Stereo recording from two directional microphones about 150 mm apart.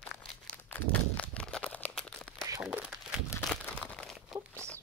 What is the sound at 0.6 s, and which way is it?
Crumpling, 10° left (ahead or behind).